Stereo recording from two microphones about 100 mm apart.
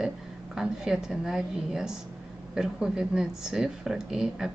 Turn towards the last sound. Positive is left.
turn(degrees=-5)  # may be behind; listen again after turning